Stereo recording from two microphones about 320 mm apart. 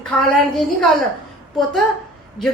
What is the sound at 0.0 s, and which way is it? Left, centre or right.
Speech, centre.